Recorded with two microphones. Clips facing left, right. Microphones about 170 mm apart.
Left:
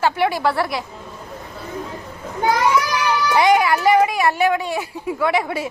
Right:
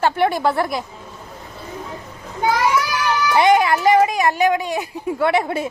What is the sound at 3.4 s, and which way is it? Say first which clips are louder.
Music: right 1 dB; 25° right (ahead or behind).